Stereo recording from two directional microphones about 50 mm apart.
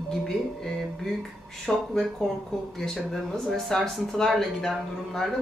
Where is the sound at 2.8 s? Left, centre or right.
Centre.